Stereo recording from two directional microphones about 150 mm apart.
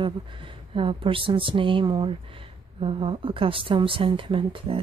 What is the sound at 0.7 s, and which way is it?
Speech, 35° right (ahead or behind).